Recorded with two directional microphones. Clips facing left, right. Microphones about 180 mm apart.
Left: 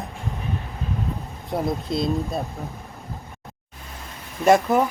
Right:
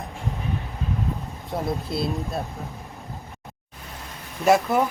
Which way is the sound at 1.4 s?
Centre (ahead or behind).